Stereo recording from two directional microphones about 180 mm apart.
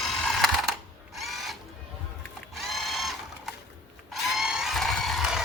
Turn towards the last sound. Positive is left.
turn(degrees=0)  # may be behind; listen again after turning